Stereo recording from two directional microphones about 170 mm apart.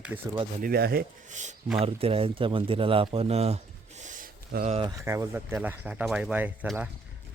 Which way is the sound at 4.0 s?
50° right (ahead or behind).